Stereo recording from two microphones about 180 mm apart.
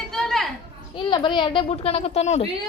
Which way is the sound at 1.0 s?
25° left (ahead or behind).